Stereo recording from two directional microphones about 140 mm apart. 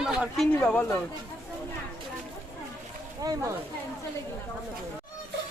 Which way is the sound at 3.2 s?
25° right (ahead or behind).